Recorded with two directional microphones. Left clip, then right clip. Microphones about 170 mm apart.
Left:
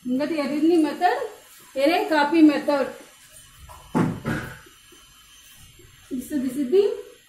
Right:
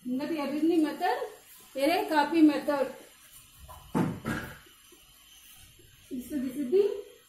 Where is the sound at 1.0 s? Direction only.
25° right (ahead or behind).